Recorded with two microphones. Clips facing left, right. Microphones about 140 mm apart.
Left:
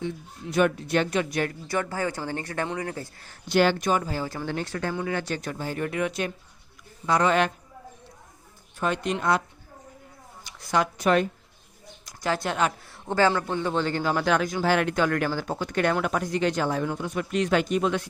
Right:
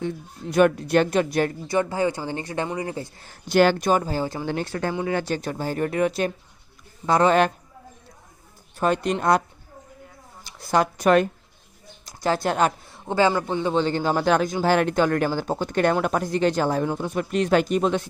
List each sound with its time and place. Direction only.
0.5 s speech: 45° right (ahead or behind)
1.6 s speech: 15° right (ahead or behind)
3.5 s speech: 45° right (ahead or behind)
8.8 s speech: 40° right (ahead or behind)
10.6 s speech: 35° right (ahead or behind)
12.0 s speech: 30° right (ahead or behind)
12.9 s a sound: 15° right (ahead or behind)
13.3 s a man's voice: 15° right (ahead or behind); by 18.0 s 35° right (ahead or behind)